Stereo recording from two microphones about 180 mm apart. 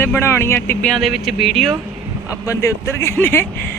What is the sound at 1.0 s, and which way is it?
Speech, centre (ahead or behind).